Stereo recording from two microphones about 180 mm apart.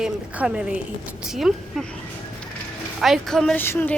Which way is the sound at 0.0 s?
5° right (ahead or behind).